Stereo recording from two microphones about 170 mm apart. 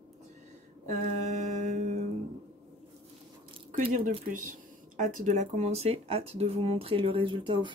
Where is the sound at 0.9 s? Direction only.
45° right (ahead or behind).